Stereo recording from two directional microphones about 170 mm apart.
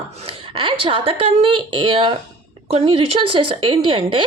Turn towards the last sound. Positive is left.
turn(degrees=-30)  # may be behind; listen again after turning